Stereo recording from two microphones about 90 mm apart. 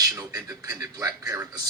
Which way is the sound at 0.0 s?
40° right (ahead or behind).